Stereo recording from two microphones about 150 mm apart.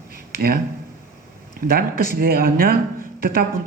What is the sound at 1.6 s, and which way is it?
A man's voice, 85° right.